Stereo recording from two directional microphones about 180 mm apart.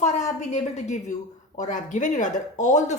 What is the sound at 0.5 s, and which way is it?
A woman's voice, 40° left (ahead or behind).